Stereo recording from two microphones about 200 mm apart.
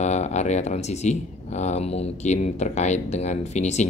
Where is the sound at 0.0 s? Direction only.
35° left (ahead or behind).